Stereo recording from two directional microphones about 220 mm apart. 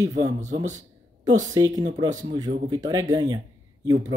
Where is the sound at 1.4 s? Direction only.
15° right (ahead or behind).